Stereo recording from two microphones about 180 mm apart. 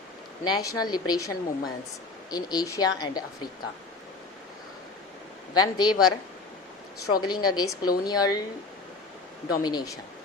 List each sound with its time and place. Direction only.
0.4 s speech: 20° left (ahead or behind)
5.5 s speech: 25° left (ahead or behind)
7.1 s speech: 25° left (ahead or behind)
9.6 s speech: 20° left (ahead or behind)